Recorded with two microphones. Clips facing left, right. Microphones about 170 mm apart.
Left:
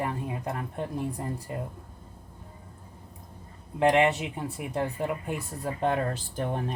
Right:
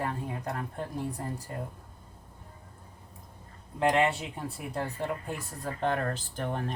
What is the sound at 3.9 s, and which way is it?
A woman's voice, 20° left (ahead or behind).